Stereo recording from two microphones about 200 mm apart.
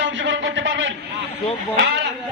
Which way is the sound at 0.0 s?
65° right (ahead or behind).